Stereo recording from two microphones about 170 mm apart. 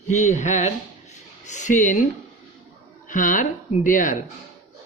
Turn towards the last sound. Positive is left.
turn(degrees=50)  # may be behind; listen again after turning